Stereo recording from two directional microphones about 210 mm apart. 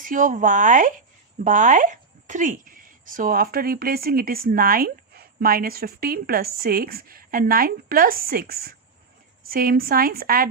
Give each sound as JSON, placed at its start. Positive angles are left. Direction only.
{"t": 0.0, "sound": "a woman's voice", "side_deg": -40}